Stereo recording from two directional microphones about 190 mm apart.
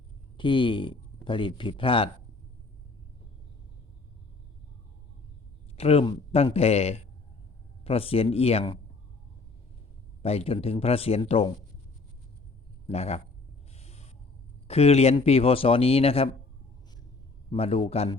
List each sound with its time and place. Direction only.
0.3 s speech: 25° left (ahead or behind)
5.7 s speech: 30° left (ahead or behind)
10.2 s speech: 30° left (ahead or behind)
12.9 s speech: 35° left (ahead or behind)
13.7 s a sound: 35° left (ahead or behind)
14.7 s speech: 35° left (ahead or behind)
17.5 s speech: 30° left (ahead or behind)